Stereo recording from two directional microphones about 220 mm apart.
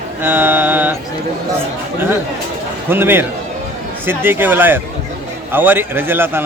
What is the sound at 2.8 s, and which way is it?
Speech, 10° right (ahead or behind).